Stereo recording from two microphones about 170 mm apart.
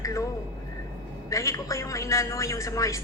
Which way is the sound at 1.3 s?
20° left (ahead or behind).